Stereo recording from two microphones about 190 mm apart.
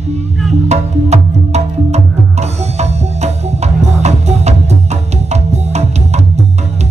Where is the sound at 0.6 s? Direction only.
35° right (ahead or behind).